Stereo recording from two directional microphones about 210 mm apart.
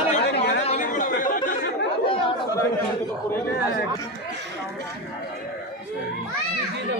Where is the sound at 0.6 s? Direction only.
35° left (ahead or behind).